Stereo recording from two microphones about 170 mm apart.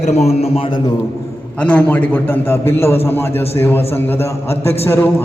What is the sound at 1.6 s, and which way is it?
A man's voice, 10° left (ahead or behind).